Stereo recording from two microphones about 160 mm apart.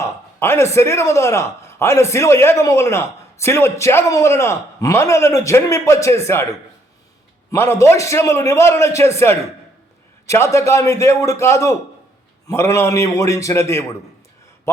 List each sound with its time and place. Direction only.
0.0 s a man's voice: 15° left (ahead or behind)